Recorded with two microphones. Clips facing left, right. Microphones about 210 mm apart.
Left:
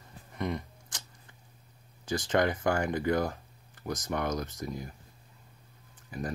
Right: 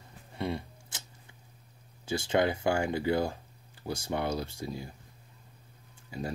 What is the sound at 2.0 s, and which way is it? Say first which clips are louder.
Speech: even; 10° right (ahead or behind).